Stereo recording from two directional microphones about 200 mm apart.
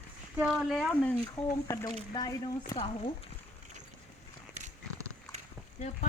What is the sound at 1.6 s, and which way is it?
Speech, 15° left (ahead or behind).